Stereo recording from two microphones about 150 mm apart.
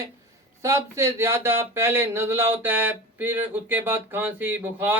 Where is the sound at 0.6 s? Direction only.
20° right (ahead or behind).